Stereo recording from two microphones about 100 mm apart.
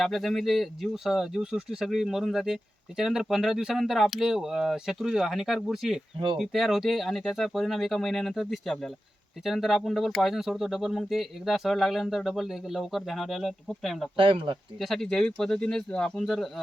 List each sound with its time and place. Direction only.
0.0 s speech: centre (ahead or behind)
14.2 s speech: 60° right (ahead or behind)
14.8 s speech: centre (ahead or behind)